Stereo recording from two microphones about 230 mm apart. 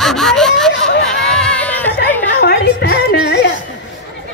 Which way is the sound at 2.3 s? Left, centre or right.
Left.